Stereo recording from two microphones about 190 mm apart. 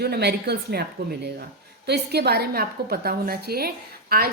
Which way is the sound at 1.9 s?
60° right (ahead or behind).